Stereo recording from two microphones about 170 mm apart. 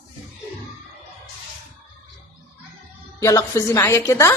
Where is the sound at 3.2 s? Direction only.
15° left (ahead or behind).